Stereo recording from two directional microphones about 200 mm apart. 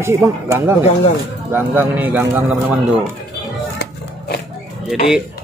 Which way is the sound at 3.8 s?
55° left (ahead or behind).